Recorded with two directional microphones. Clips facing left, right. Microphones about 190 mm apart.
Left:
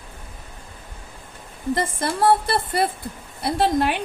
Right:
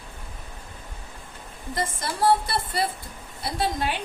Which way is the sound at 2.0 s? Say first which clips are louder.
Left 3 dB; 55° left (ahead or behind).